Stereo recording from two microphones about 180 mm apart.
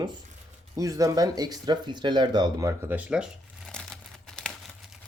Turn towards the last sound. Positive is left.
turn(degrees=5)  # may be behind; listen again after turning